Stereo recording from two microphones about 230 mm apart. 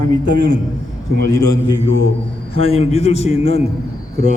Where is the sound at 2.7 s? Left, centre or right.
Left.